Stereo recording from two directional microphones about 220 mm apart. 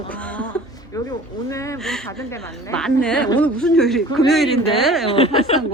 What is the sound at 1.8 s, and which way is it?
Speech, centre (ahead or behind).